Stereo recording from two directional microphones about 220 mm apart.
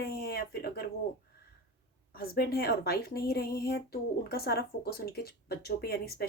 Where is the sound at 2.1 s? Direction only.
45° left (ahead or behind).